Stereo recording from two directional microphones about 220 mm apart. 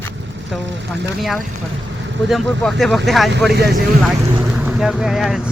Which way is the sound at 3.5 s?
45° right (ahead or behind).